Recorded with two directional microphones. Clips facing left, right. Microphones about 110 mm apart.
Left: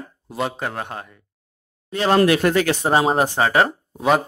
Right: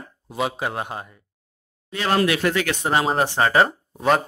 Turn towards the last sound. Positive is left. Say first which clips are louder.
# left 1 dB
turn(degrees=0)  # may be behind; listen again after turning